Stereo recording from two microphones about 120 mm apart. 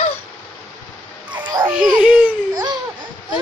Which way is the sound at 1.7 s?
10° right (ahead or behind).